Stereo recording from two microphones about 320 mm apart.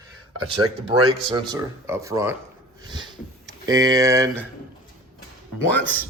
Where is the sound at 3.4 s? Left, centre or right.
Centre.